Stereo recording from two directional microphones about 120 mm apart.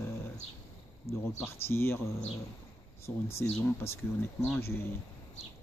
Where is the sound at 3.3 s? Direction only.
20° left (ahead or behind).